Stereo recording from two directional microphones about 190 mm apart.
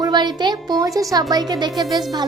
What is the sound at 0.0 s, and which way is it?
A woman's voice, 25° right (ahead or behind).